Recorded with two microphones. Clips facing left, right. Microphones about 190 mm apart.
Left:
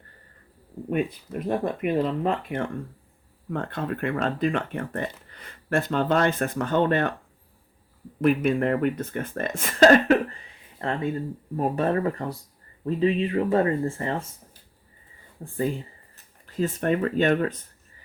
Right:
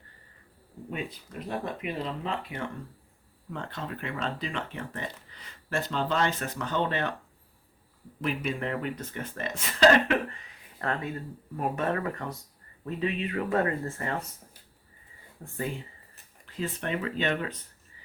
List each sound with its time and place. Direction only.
0.9 s speech: 55° left (ahead or behind)
8.2 s speech: 50° left (ahead or behind)
10.3 s a sound: 30° left (ahead or behind)
11.5 s speech: 35° left (ahead or behind)
15.4 s speech: 30° left (ahead or behind)
16.6 s speech: 45° left (ahead or behind)